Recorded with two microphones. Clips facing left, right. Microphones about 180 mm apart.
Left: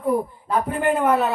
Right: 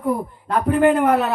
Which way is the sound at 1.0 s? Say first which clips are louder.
Right 2 dB; 70° right (ahead or behind).